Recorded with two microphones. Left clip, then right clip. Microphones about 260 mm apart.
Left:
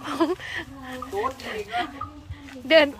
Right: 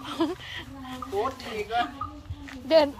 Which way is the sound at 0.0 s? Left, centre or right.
Centre.